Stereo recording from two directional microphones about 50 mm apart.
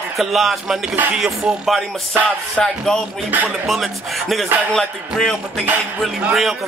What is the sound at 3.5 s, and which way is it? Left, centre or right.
Speech, centre.